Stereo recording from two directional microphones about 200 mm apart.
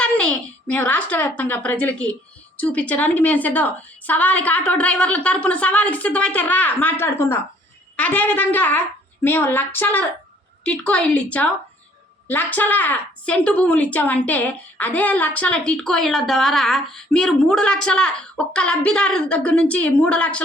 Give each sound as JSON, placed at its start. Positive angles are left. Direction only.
{"t": 0.0, "sound": "a woman's voice", "side_deg": 5}